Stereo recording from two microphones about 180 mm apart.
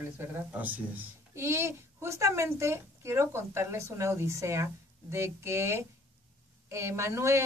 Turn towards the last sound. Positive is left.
turn(degrees=-15)  # may be behind; listen again after turning